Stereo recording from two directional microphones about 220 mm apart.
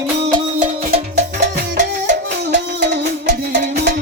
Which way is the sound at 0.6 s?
35° right (ahead or behind).